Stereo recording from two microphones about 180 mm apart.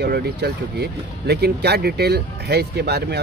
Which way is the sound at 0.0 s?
65° right (ahead or behind).